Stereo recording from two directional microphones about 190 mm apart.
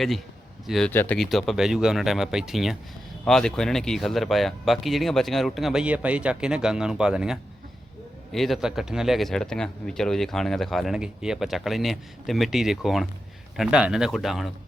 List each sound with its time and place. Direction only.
0.7 s speech: 5° left (ahead or behind)